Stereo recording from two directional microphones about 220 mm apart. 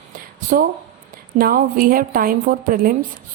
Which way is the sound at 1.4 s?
40° right (ahead or behind).